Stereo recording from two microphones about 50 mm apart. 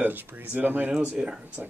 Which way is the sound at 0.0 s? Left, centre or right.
Right.